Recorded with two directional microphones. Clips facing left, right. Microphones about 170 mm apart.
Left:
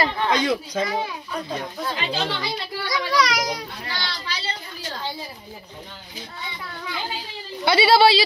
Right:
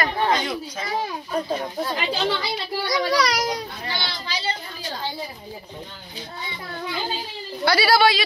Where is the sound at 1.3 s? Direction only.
35° right (ahead or behind).